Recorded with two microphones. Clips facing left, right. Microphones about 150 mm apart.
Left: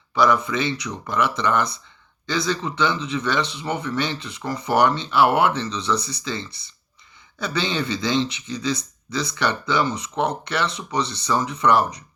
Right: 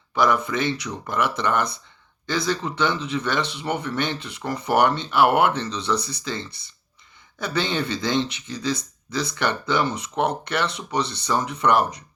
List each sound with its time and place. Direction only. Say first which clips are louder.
0.2 s speech: left 1 dB; 50° right (ahead or behind)